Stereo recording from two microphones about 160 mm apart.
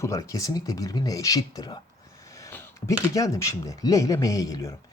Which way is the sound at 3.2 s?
20° left (ahead or behind).